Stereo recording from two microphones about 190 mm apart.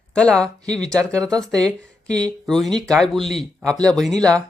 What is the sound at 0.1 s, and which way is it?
Speech, 5° left (ahead or behind).